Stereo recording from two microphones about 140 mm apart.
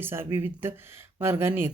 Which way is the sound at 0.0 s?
15° right (ahead or behind).